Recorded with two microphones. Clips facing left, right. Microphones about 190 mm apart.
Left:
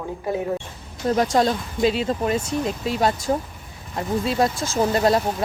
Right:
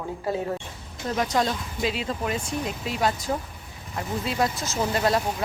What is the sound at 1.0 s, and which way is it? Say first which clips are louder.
Speech: left 6 dB; 40° left (ahead or behind).